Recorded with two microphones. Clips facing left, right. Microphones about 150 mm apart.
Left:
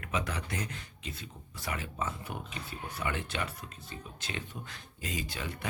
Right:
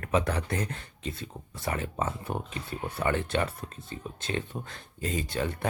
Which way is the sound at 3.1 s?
40° right (ahead or behind).